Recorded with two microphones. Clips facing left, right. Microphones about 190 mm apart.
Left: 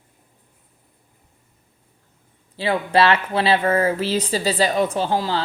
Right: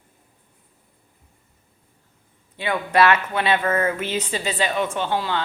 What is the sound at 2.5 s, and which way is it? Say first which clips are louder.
Speech: left 2 dB; 30° left (ahead or behind).